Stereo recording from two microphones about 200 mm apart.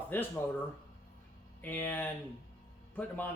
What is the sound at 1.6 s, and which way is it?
Speech, 10° left (ahead or behind).